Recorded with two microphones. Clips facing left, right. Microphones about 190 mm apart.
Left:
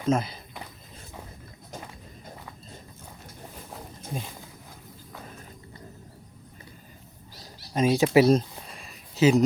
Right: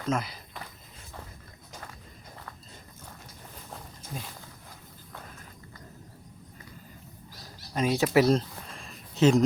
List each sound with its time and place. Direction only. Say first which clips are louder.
0.0 s speech: left 5 dB; 25° left (ahead or behind)
4.1 s speech: left 5 dB; 20° left (ahead or behind)
7.7 s a sound: left 4 dB; 20° left (ahead or behind); by 9.4 s 5° left (ahead or behind)